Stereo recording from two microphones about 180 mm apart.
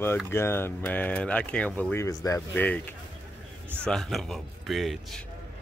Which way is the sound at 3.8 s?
Centre (ahead or behind).